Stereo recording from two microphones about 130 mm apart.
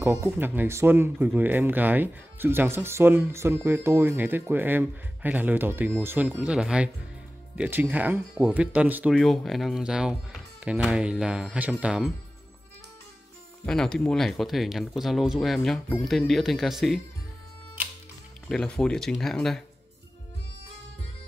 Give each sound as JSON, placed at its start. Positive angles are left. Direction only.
{"t": 0.0, "sound": "speech", "side_deg": -15}
{"t": 9.1, "sound": "speech", "side_deg": 0}
{"t": 13.7, "sound": "speech", "side_deg": 5}
{"t": 18.5, "sound": "speech", "side_deg": 5}